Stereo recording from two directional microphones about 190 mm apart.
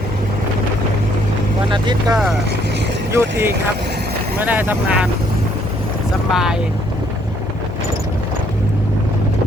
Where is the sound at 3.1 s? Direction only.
15° right (ahead or behind).